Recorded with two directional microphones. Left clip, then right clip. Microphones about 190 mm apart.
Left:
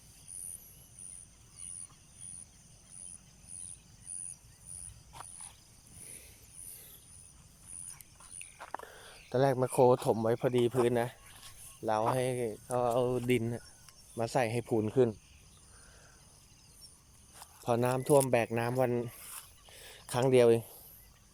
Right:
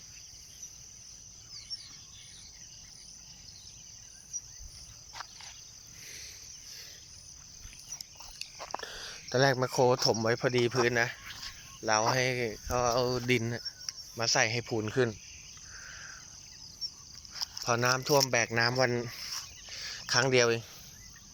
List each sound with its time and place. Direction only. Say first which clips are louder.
8.5 s a sound: right 3 dB; 20° right (ahead or behind)
8.8 s a sound: right 8 dB; 5° left (ahead or behind)
10.0 s speech: right 2 dB; 10° left (ahead or behind)
14.2 s speech: right 3 dB; 25° left (ahead or behind)
17.7 s speech: right 1 dB; 20° left (ahead or behind)
19.8 s speech: right 3 dB; 25° left (ahead or behind)